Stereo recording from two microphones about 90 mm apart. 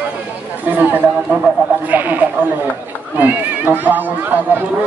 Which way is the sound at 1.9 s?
20° right (ahead or behind).